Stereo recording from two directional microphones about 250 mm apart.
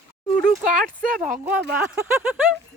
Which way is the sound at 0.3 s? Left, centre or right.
Centre.